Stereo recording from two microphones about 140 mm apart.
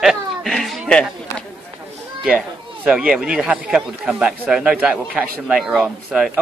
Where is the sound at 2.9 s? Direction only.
5° right (ahead or behind).